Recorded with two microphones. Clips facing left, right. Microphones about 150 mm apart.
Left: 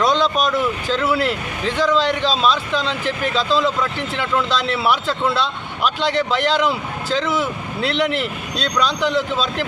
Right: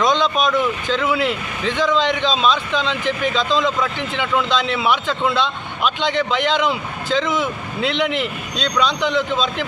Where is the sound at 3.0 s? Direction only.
35° left (ahead or behind).